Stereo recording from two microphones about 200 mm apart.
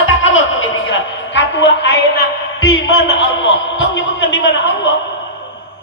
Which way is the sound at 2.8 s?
70° left (ahead or behind).